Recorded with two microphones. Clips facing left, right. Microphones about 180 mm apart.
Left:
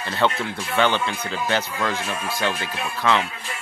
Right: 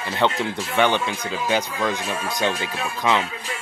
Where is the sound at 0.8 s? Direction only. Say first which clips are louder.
Right 1 dB; 15° right (ahead or behind).